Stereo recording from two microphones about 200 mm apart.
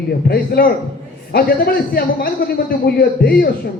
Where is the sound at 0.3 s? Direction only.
50° left (ahead or behind).